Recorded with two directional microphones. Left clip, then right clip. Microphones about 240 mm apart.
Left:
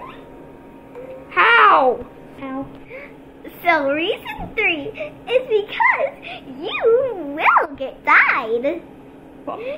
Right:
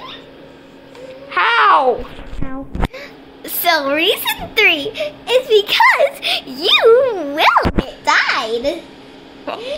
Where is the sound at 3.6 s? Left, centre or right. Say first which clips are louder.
Right 3 dB; right.